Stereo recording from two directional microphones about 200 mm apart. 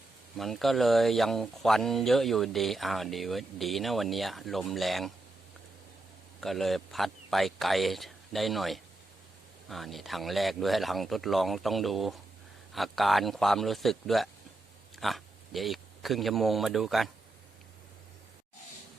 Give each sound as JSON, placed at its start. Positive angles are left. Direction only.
{"t": 0.3, "sound": "speech", "side_deg": 0}
{"t": 6.4, "sound": "speech", "side_deg": 0}